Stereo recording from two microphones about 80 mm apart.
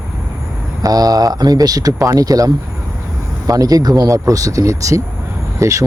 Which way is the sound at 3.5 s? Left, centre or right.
Right.